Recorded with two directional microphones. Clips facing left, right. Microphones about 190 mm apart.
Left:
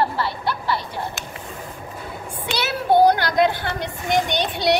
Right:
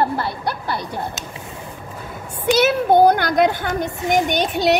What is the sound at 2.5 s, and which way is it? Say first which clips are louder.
A woman's voice: right 4 dB; 50° right (ahead or behind).